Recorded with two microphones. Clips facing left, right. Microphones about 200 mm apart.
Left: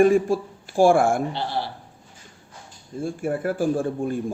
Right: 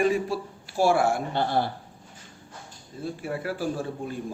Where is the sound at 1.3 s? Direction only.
50° right (ahead or behind).